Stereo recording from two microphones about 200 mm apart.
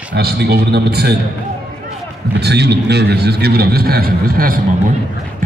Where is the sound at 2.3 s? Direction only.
55° right (ahead or behind).